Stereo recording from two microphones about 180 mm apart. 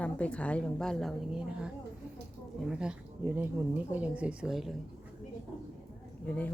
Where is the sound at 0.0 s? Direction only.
5° left (ahead or behind).